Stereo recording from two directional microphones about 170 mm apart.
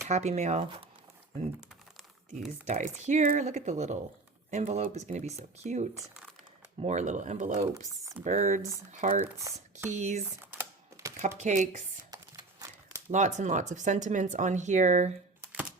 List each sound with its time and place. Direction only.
0.1 s speech: 40° right (ahead or behind)
2.6 s speech: 45° right (ahead or behind)
7.9 s speech: 20° right (ahead or behind)
8.2 s speech: 45° right (ahead or behind)
9.5 s speech: 20° right (ahead or behind)
9.9 s speech: 45° right (ahead or behind)
10.4 s typing: 15° right (ahead or behind)
11.3 s speech: 45° right (ahead or behind)
12.1 s crumpling: 20° right (ahead or behind)
13.1 s speech: 45° right (ahead or behind)